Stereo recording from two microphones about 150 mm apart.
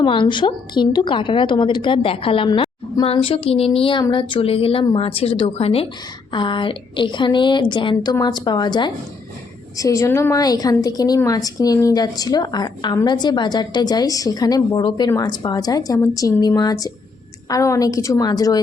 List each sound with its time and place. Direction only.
0.0 s a woman's voice: 35° left (ahead or behind)